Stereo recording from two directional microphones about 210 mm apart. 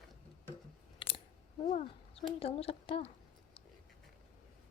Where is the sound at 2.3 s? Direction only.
30° left (ahead or behind).